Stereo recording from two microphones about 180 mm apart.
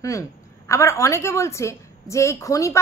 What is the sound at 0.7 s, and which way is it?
A woman's voice, 15° left (ahead or behind).